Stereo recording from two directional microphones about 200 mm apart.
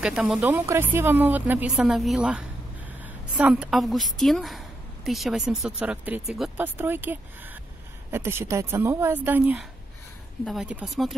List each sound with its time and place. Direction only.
0.0 s a woman's voice: 5° right (ahead or behind)